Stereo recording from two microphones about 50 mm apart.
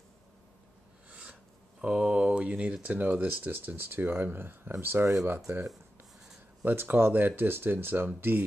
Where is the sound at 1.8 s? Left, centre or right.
Centre; by 5.0 s right.